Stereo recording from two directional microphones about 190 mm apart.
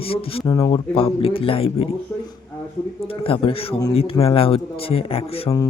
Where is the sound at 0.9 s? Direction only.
30° left (ahead or behind).